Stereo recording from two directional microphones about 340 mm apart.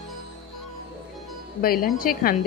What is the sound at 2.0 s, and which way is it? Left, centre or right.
Speech, left.